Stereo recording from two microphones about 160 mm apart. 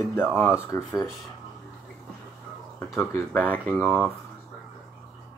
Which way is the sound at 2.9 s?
15° left (ahead or behind).